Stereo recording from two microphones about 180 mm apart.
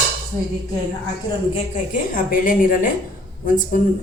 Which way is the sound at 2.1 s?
50° left (ahead or behind).